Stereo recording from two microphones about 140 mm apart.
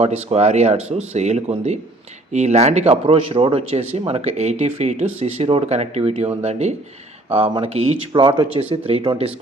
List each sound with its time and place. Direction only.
0.0 s speech: 50° right (ahead or behind)
8.1 s speech: 35° right (ahead or behind)
8.9 s speech: 45° right (ahead or behind)